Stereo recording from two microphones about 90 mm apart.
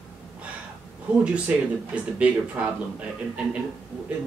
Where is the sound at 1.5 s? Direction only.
15° right (ahead or behind).